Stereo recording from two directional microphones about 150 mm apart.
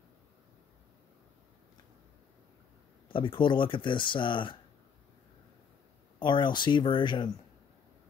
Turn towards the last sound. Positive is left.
turn(degrees=30)  # may be behind; listen again after turning